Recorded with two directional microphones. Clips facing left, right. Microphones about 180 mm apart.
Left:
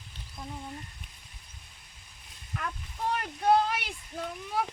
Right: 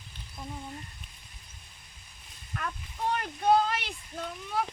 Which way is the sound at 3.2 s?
5° left (ahead or behind).